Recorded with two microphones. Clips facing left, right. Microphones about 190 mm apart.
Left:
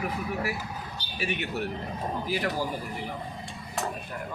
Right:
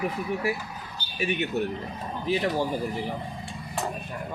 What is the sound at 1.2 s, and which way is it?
Speech, 20° right (ahead or behind).